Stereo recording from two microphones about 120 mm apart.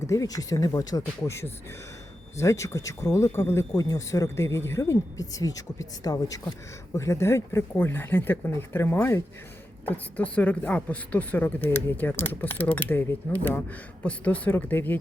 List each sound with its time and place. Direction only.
0.1 s a woman's voice: 30° left (ahead or behind)